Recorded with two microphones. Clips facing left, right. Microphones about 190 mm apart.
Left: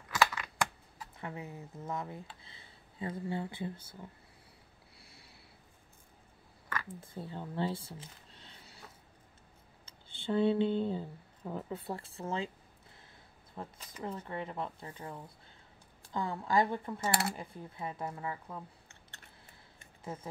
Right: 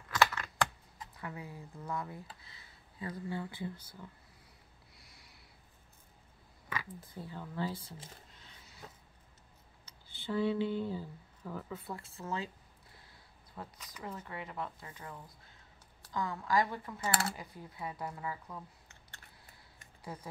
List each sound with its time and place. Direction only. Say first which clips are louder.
0.1 s computer keyboard: even; 10° left (ahead or behind)
1.1 s speech: left 2 dB; 25° left (ahead or behind)
4.9 s a sound: left 4 dB; 30° left (ahead or behind)
6.9 s speech: left 3 dB; 25° left (ahead or behind)
9.8 s speech: left 4 dB; 25° left (ahead or behind)
13.6 s speech: left 4 dB; 25° left (ahead or behind)
19.8 s a sound: left 3 dB; 25° left (ahead or behind)